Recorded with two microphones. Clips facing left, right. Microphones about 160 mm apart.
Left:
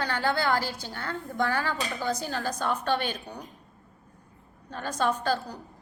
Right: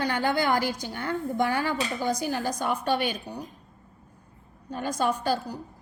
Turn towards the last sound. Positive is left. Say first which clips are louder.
# right 1 dB
turn(degrees=-10)  # may be behind; listen again after turning